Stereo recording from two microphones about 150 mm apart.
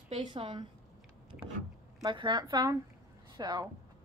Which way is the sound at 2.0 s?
30° right (ahead or behind).